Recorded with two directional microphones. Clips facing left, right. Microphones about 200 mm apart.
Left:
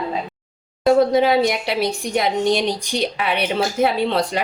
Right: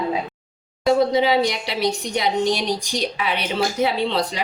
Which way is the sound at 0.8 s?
55° left (ahead or behind).